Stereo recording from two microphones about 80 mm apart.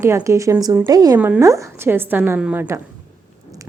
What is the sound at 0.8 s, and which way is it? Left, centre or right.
Speech, right.